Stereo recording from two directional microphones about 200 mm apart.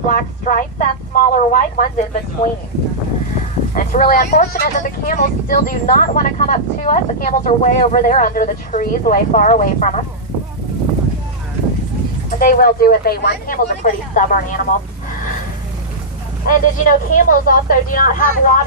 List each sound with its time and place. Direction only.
0.1 s speech: 40° left (ahead or behind)
2.4 s speech: 30° left (ahead or behind)
3.8 s speech: 45° left (ahead or behind)
12.4 s speech: 45° left (ahead or behind)
16.5 s speech: 40° left (ahead or behind)